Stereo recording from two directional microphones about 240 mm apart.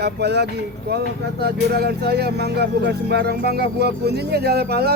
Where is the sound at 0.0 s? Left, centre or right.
Right.